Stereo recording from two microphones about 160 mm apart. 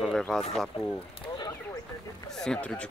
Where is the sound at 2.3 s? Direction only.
5° left (ahead or behind).